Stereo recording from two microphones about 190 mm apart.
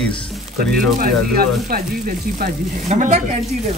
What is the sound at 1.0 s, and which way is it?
Speech, 50° right (ahead or behind).